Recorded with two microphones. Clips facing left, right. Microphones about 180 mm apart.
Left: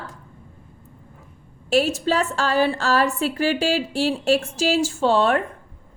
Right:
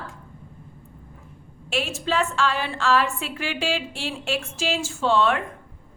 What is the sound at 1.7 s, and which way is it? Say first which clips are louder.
A woman's voice: left 7 dB; 40° left (ahead or behind).